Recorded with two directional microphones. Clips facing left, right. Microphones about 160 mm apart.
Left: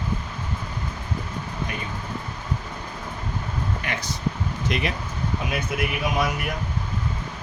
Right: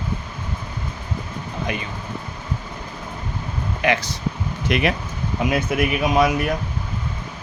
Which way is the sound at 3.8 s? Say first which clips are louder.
Right 9 dB; 85° right.